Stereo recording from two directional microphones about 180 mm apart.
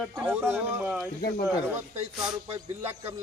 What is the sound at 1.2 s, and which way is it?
Speech, 60° left (ahead or behind).